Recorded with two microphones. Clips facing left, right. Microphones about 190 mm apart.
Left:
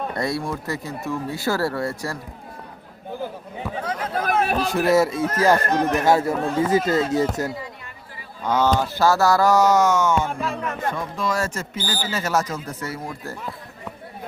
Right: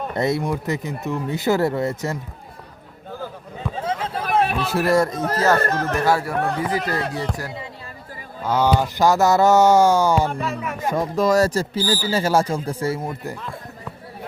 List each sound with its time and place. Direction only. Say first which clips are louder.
0.2 s speech: right 6 dB; 20° right (ahead or behind)
3.1 s a sound: left 2 dB; 15° left (ahead or behind)
3.8 s a sound: right 1 dB; 25° right (ahead or behind)
4.4 s a sound: left 1 dB; 40° left (ahead or behind)
4.7 s speech: left 1 dB; centre (ahead or behind)
5.6 s speech: left 1 dB; 15° left (ahead or behind)
6.3 s speech: right 1 dB; 65° right (ahead or behind)
6.6 s speech: left 4 dB; 25° left (ahead or behind)
8.4 s speech: right 1 dB; 10° right (ahead or behind); by 10.2 s 30° right (ahead or behind)
10.2 s speech: right 2 dB; centre (ahead or behind)
10.9 s speech: right 7 dB; 40° right (ahead or behind)